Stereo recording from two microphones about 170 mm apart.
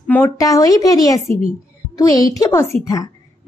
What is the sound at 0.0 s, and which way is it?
A woman's voice, 10° left (ahead or behind).